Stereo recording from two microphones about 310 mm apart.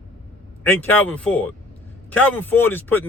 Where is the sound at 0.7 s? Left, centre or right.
Centre.